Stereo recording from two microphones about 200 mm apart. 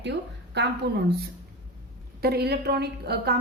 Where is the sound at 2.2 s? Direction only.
55° right (ahead or behind).